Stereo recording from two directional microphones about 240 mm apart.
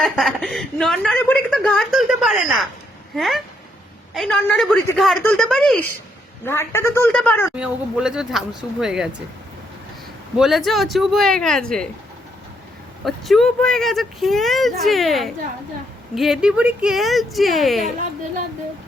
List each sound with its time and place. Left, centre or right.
0.0 s a woman's voice: centre
7.5 s a woman's voice: centre
10.3 s a woman's voice: centre
13.1 s a woman's voice: centre